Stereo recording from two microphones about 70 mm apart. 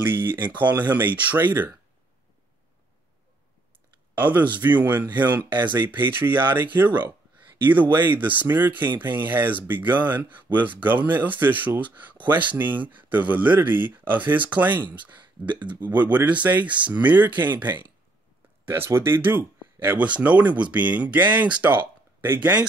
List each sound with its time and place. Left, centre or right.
0.0 s speech: right
4.2 s speech: right